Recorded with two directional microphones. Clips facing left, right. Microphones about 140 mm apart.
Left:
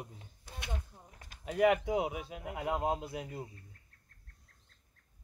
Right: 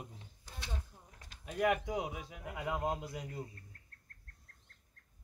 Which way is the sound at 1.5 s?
90° left.